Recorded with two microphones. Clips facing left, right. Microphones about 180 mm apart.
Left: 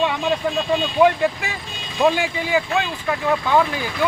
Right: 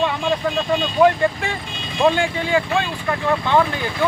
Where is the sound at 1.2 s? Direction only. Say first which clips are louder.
Right 1 dB; 5° left (ahead or behind).